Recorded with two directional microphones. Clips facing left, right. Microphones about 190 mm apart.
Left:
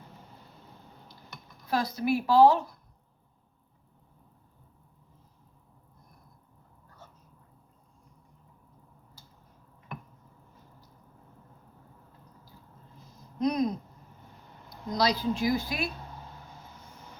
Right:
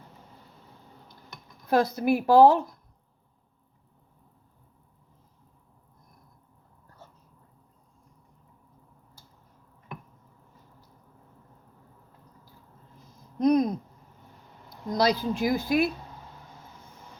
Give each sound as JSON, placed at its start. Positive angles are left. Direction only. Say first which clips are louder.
{"t": 1.6, "sound": "speech", "louder": "right 5 dB", "side_deg": -55}
{"t": 13.4, "sound": "a sound", "louder": "right 5 dB", "side_deg": -50}
{"t": 14.9, "sound": "speech", "louder": "right 3 dB", "side_deg": -55}